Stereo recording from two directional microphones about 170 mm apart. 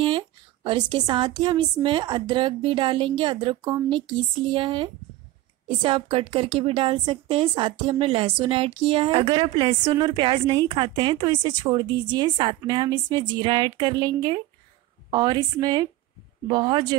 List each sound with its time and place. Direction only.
0.7 s a woman's voice: 25° right (ahead or behind)